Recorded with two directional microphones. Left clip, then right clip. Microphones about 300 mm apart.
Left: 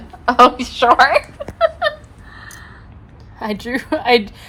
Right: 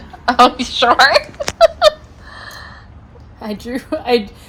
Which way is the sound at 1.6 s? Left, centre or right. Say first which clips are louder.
Right 6 dB; centre.